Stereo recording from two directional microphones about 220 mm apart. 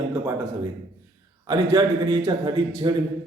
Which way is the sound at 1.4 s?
20° right (ahead or behind).